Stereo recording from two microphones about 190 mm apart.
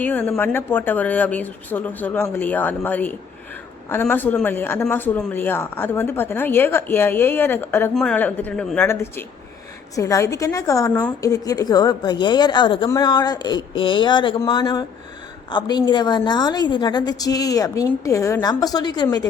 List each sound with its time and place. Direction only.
0.0 s a woman's voice: 10° left (ahead or behind)